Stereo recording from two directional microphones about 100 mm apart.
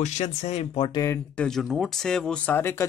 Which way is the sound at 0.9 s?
30° left (ahead or behind).